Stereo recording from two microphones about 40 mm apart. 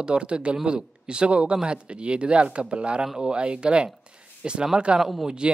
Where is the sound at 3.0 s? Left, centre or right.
Centre.